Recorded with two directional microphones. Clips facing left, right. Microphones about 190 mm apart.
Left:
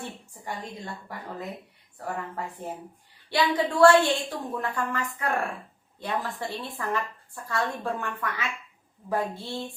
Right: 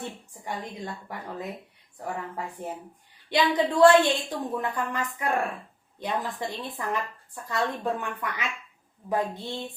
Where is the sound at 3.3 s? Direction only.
20° right (ahead or behind).